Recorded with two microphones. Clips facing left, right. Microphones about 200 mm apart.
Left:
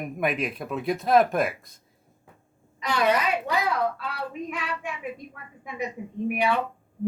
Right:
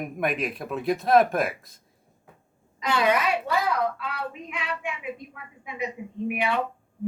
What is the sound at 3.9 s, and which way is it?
Child singing, 40° left (ahead or behind).